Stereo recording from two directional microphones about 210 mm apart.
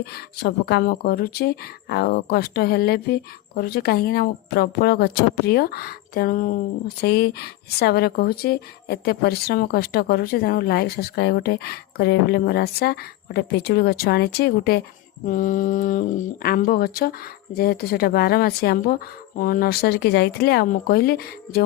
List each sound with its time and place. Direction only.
0.0 s speech: 50° left (ahead or behind)